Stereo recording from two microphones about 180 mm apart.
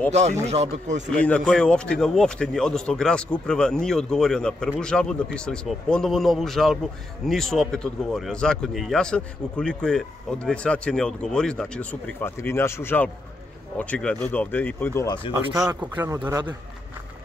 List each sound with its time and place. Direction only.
0.1 s speech: 35° right (ahead or behind)
1.1 s speech: 5° left (ahead or behind)
15.3 s speech: 20° right (ahead or behind)